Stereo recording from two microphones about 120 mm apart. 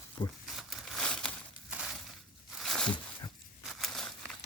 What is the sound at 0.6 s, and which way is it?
Crumpling, centre (ahead or behind).